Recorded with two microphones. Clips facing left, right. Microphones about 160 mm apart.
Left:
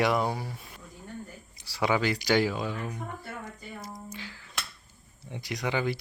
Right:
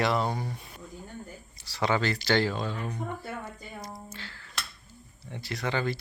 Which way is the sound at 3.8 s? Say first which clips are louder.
Even; 5° left (ahead or behind).